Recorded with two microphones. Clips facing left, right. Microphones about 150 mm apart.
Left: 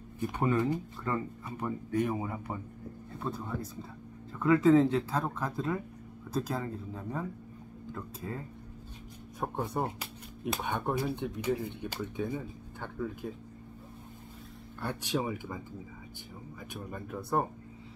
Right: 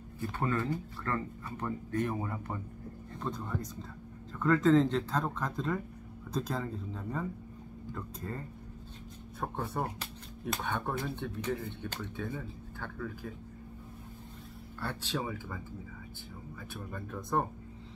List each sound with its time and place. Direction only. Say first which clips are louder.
0.2 s speech: left 4 dB; 15° left (ahead or behind)
9.4 s speech: left 2 dB; 15° left (ahead or behind)
14.8 s speech: left 3 dB; 15° left (ahead or behind)
16.7 s speech: left 2 dB; 10° left (ahead or behind)